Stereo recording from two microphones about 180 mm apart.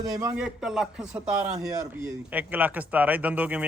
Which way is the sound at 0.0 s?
20° right (ahead or behind).